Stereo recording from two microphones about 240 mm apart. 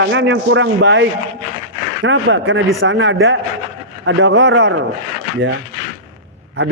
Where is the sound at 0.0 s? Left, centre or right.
Right.